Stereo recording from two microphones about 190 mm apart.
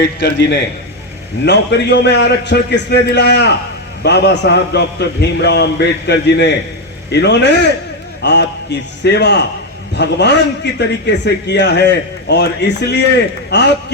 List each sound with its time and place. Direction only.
0.0 s a man's voice: 60° left (ahead or behind)